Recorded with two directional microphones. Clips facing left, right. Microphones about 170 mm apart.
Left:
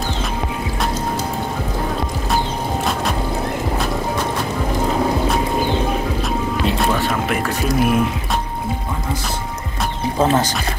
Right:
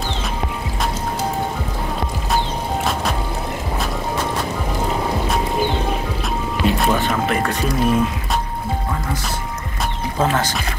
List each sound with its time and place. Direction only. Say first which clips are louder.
6.2 s music: even; centre (ahead or behind)
10.2 s speech: left 3 dB; 20° left (ahead or behind)